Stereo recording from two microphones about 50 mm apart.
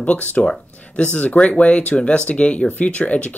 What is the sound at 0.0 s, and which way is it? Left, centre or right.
Speech, left.